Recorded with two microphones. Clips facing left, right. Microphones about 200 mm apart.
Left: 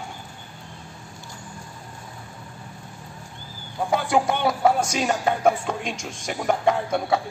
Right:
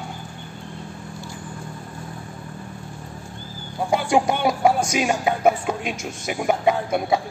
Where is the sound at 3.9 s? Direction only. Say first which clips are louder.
Right 2 dB; 15° right (ahead or behind).